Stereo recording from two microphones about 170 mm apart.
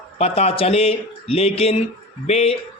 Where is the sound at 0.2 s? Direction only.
40° left (ahead or behind).